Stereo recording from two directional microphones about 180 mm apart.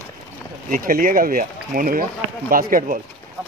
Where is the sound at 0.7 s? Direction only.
50° right (ahead or behind).